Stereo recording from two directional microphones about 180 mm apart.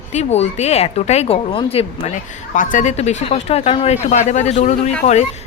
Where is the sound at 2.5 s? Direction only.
45° left (ahead or behind).